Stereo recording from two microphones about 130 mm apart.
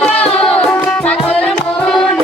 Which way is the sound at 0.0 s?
10° left (ahead or behind).